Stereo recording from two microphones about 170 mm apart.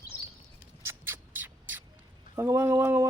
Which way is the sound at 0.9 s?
15° right (ahead or behind).